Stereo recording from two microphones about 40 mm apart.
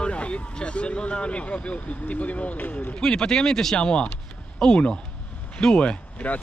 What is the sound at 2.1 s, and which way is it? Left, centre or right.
Speech, left.